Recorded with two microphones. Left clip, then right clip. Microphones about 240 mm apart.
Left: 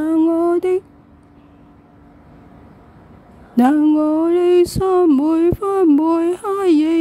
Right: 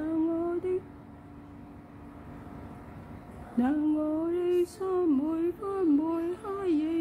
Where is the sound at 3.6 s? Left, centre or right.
Left.